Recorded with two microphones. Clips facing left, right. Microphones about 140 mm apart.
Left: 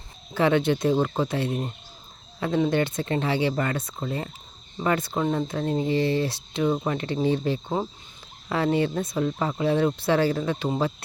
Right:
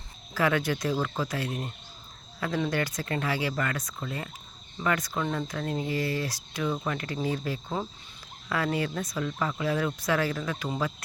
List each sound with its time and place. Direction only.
0.3 s speech: 25° left (ahead or behind)